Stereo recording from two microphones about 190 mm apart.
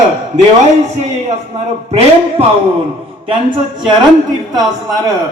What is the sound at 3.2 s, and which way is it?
Speech, 25° right (ahead or behind).